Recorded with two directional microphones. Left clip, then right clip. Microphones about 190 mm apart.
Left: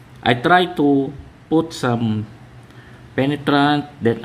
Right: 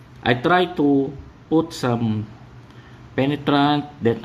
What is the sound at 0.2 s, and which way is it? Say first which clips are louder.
Speech: left 3 dB; 5° left (ahead or behind).